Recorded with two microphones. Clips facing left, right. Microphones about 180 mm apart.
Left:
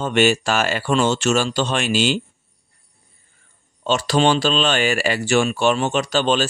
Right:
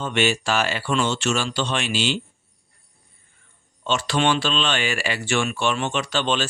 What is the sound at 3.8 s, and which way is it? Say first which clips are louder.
Speech: left 4 dB; 40° left (ahead or behind).